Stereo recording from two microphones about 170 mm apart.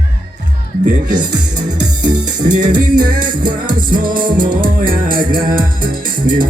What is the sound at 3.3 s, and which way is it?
Music, 25° right (ahead or behind).